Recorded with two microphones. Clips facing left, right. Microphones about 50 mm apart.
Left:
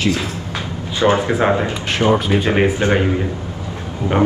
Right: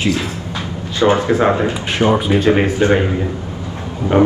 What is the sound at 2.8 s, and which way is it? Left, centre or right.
Speech, centre.